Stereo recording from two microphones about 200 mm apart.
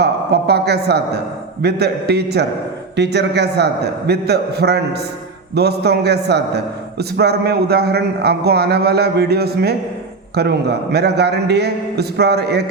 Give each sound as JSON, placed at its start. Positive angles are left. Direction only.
{"t": 0.0, "sound": "a man's voice", "side_deg": -55}